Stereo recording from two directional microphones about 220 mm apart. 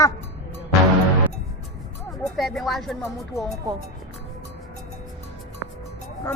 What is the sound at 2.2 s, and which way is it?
Speech, centre (ahead or behind).